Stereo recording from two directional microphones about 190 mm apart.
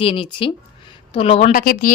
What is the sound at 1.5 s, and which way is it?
Speech, 50° left (ahead or behind).